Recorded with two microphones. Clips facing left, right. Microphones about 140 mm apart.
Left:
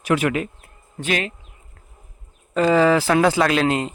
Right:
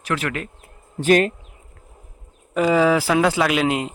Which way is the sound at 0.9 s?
40° right (ahead or behind).